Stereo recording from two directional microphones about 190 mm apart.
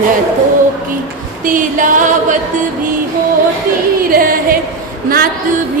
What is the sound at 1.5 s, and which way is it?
Music, 45° right (ahead or behind).